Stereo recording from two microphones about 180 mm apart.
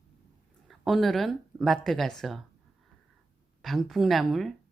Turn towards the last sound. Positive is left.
turn(degrees=0)  # may be behind; listen again after turning